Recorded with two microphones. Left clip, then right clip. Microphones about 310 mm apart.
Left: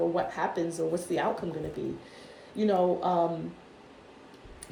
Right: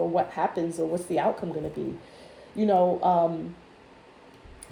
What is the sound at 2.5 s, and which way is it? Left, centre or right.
Speech, centre.